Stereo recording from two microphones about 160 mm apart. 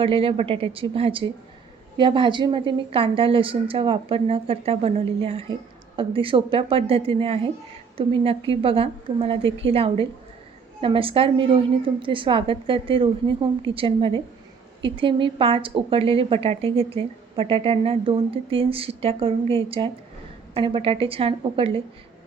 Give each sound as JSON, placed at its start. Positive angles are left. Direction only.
{"t": 0.0, "sound": "a woman's voice", "side_deg": -35}